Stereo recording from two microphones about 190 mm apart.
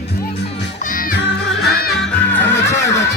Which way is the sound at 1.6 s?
55° left (ahead or behind).